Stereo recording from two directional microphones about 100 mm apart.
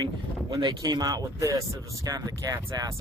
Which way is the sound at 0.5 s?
45° right (ahead or behind).